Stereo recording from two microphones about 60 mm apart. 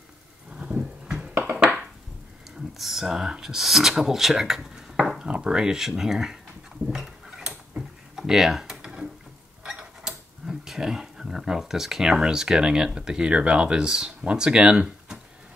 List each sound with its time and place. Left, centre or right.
0.6 s a sound: centre
2.8 s speech: centre
5.2 s speech: centre
6.9 s a sound: centre
9.6 s tick-tock: centre
10.0 s speech: centre